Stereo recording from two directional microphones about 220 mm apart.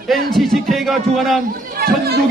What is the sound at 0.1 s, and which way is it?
A man's voice, centre (ahead or behind).